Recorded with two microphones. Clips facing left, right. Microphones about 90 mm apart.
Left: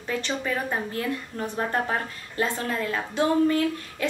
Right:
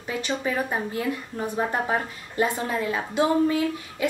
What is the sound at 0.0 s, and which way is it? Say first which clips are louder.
A woman's voice: right 1 dB; 10° right (ahead or behind).